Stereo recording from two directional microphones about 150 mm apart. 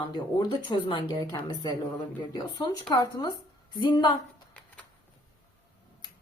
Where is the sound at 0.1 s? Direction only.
30° left (ahead or behind).